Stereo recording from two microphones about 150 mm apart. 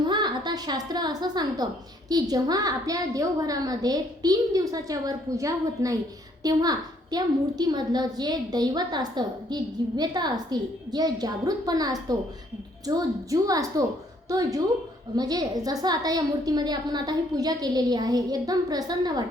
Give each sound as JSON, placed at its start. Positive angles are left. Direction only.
{"t": 0.1, "sound": "a woman's voice", "side_deg": -30}